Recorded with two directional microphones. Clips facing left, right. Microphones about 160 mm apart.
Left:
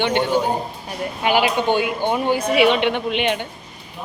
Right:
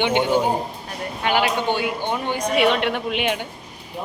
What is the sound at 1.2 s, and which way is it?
Speech, 15° left (ahead or behind).